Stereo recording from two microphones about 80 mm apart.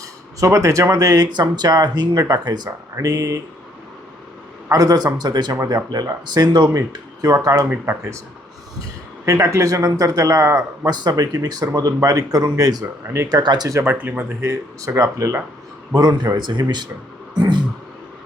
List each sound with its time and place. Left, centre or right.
0.3 s speech: right
4.7 s speech: right
5.1 s speech: right
7.7 s speech: right
9.2 s speech: right
13.8 s speech: right
14.9 s speech: right
15.9 s speech: right